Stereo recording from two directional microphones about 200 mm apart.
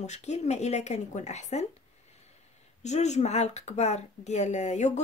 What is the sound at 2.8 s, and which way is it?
Speech, 35° left (ahead or behind).